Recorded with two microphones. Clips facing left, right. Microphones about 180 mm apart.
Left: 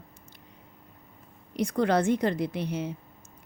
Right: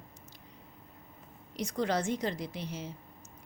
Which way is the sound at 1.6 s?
60° left (ahead or behind).